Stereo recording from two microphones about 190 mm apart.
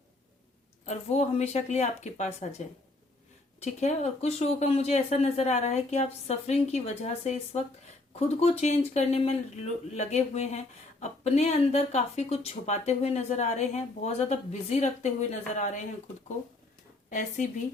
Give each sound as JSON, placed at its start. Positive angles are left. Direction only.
{"t": 0.9, "sound": "speech", "side_deg": 35}
{"t": 3.6, "sound": "speech", "side_deg": 35}
{"t": 17.1, "sound": "speech", "side_deg": 40}